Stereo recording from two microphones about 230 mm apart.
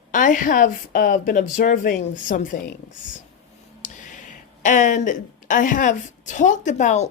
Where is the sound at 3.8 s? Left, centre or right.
Left.